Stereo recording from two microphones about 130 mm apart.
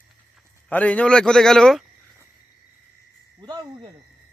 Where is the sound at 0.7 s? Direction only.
10° left (ahead or behind).